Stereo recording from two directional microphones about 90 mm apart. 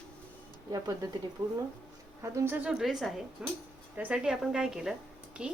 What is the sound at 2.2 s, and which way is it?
Speech, 30° right (ahead or behind).